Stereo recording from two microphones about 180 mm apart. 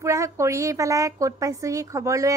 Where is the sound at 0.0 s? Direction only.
15° right (ahead or behind).